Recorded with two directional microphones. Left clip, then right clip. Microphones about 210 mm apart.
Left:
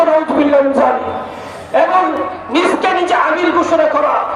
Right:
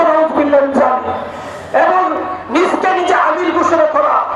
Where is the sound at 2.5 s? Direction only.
30° left (ahead or behind).